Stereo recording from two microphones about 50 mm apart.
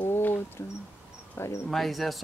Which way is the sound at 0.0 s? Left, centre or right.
Left.